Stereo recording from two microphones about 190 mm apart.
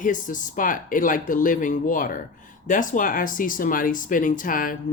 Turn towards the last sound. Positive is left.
turn(degrees=45)  # may be behind; listen again after turning